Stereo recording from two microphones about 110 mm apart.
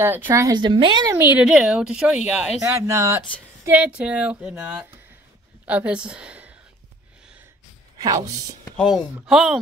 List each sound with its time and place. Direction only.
0.0 s speech: 20° right (ahead or behind)
0.5 s a woman's voice: 45° right (ahead or behind)
1.1 s speech: 20° right (ahead or behind)
1.4 s speech: 5° right (ahead or behind)
2.6 s speech: 25° right (ahead or behind)
3.6 s speech: 10° right (ahead or behind)
8.0 s speech: 35° right (ahead or behind)
8.7 s speech: centre (ahead or behind)